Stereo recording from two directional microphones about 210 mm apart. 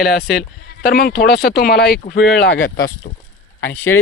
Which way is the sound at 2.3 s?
60° left (ahead or behind).